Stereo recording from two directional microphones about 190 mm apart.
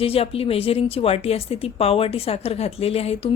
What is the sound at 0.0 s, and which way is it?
A woman's voice, 30° left (ahead or behind).